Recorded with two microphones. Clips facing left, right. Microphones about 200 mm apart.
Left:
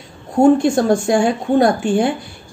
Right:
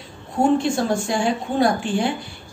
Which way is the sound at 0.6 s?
50° left (ahead or behind).